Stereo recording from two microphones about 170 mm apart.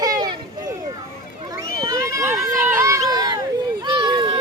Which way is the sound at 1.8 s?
20° right (ahead or behind).